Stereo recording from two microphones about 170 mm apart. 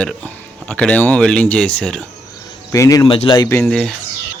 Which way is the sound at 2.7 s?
20° left (ahead or behind).